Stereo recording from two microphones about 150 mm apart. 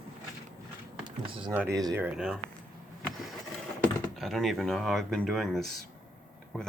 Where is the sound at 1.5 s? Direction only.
20° right (ahead or behind).